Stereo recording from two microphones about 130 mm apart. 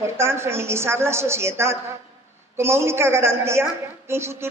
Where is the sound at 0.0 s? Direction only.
20° right (ahead or behind).